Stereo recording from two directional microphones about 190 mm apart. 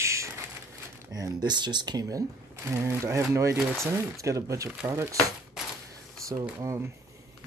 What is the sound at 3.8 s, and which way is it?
Speech, 15° right (ahead or behind).